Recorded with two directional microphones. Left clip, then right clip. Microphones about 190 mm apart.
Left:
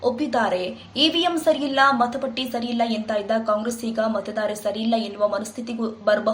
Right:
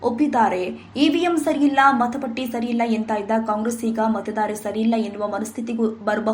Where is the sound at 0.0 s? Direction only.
10° right (ahead or behind).